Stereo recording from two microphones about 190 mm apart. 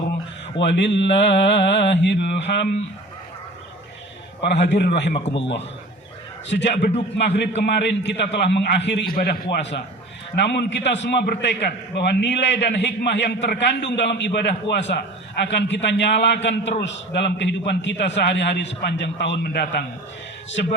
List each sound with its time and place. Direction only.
0.6 s a man's voice: 65° left (ahead or behind)
4.4 s a man's voice: 65° left (ahead or behind)
6.5 s a man's voice: 65° left (ahead or behind)